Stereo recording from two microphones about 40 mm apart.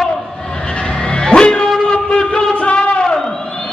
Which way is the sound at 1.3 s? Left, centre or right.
Left.